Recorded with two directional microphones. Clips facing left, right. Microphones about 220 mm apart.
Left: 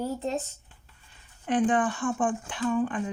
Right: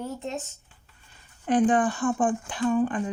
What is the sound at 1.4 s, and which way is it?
Speech, 40° right (ahead or behind).